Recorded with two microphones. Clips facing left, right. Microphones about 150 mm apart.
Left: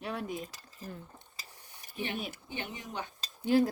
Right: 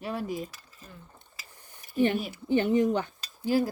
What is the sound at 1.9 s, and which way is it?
Speech, 50° right (ahead or behind).